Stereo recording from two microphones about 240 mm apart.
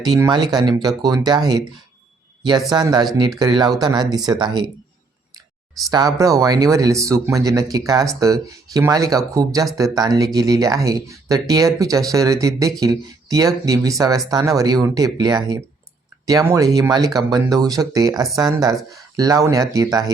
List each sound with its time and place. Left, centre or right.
0.0 s speech: centre
5.9 s speech: centre